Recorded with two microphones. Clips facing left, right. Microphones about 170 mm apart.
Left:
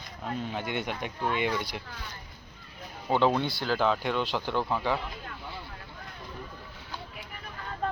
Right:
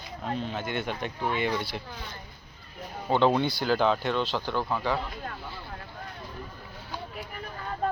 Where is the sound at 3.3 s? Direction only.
Centre (ahead or behind); by 5.0 s 15° left (ahead or behind).